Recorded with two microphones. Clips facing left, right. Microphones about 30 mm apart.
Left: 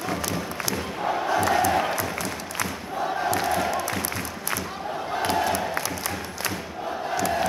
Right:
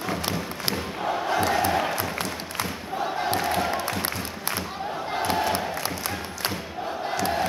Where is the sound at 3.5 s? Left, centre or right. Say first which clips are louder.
Left 1 dB; right.